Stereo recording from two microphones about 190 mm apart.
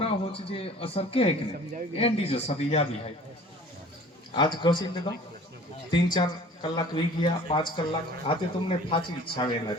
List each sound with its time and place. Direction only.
0.0 s a man's voice: 30° left (ahead or behind)
4.4 s speech: 25° left (ahead or behind)